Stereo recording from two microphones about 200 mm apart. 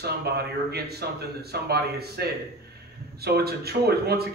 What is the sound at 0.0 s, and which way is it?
Speech, 55° right (ahead or behind).